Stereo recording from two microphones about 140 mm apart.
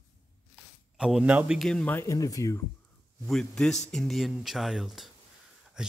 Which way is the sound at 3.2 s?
5° left (ahead or behind).